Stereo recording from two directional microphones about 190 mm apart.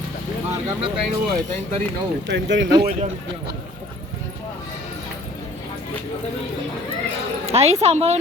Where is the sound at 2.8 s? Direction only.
45° right (ahead or behind).